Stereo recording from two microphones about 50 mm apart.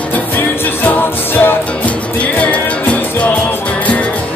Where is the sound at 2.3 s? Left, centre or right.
Left.